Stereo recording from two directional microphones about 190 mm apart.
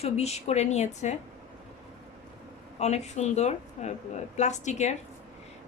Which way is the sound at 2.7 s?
35° left (ahead or behind).